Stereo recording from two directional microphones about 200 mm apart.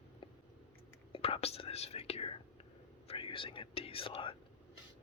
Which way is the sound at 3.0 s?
25° left (ahead or behind).